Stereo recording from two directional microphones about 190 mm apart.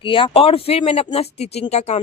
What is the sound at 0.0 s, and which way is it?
Speech, 25° left (ahead or behind).